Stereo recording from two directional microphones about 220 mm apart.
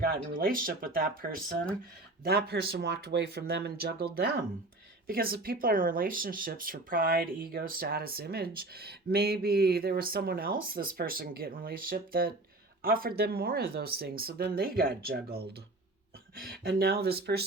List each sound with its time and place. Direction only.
0.0 s speech: 40° right (ahead or behind)